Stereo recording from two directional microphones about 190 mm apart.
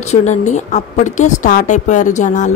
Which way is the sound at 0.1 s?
40° left (ahead or behind).